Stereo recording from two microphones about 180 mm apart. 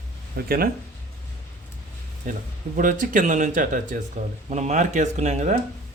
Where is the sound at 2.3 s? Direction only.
45° right (ahead or behind).